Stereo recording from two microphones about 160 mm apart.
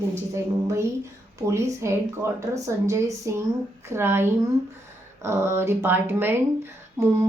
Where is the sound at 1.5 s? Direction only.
15° right (ahead or behind).